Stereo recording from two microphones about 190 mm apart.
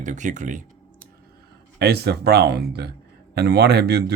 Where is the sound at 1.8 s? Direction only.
60° right (ahead or behind).